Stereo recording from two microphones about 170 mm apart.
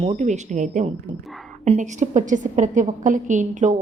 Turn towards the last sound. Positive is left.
turn(degrees=-45)  # may be behind; listen again after turning